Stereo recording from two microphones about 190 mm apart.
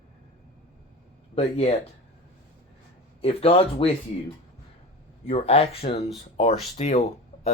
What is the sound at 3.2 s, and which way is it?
Speech, 30° left (ahead or behind).